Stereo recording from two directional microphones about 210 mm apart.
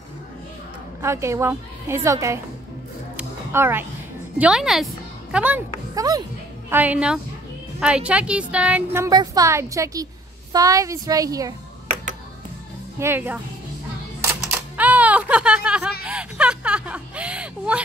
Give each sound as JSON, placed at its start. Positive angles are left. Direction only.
{"t": 1.0, "sound": "a woman's voice", "side_deg": -15}
{"t": 3.2, "sound": "music", "side_deg": -10}
{"t": 4.4, "sound": "a woman's voice", "side_deg": -5}
{"t": 13.0, "sound": "a woman's voice", "side_deg": -10}
{"t": 14.5, "sound": "typing", "side_deg": -5}
{"t": 16.1, "sound": "a sound", "side_deg": -5}